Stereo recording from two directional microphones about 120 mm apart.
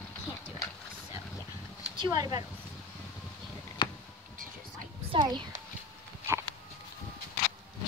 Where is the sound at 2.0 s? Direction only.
35° right (ahead or behind).